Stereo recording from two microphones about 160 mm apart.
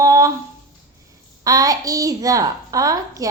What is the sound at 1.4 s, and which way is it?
A woman's voice, 20° right (ahead or behind).